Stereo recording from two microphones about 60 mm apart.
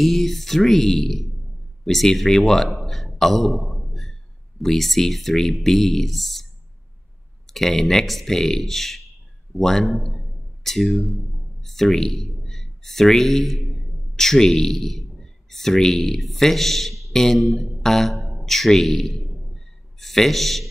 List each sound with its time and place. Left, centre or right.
0.0 s a man's voice: centre
7.4 s a man's voice: centre